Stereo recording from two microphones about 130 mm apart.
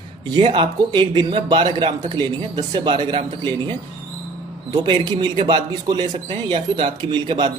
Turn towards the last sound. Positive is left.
turn(degrees=-35)  # may be behind; listen again after turning